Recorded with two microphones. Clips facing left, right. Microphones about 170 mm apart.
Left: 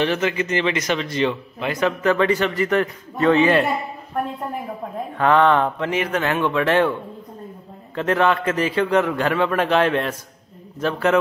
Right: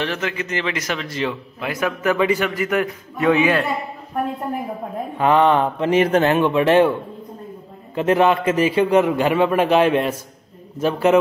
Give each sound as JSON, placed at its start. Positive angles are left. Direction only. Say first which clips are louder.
{"t": 0.0, "sound": "a man's voice", "louder": "left 4 dB", "side_deg": 0}
{"t": 5.1, "sound": "a man's voice", "louder": "right 1 dB", "side_deg": -10}
{"t": 5.9, "sound": "speech", "louder": "right 6 dB", "side_deg": -35}
{"t": 6.4, "sound": "a man's voice", "louder": "right 4 dB", "side_deg": -20}